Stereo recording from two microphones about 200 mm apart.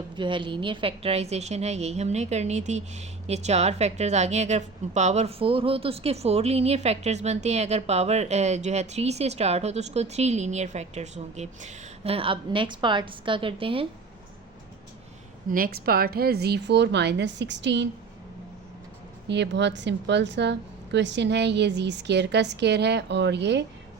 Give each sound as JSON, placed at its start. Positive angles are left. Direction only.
{"t": 0.2, "sound": "a woman's voice", "side_deg": -25}
{"t": 15.4, "sound": "a woman's voice", "side_deg": -45}
{"t": 19.3, "sound": "a woman's voice", "side_deg": -60}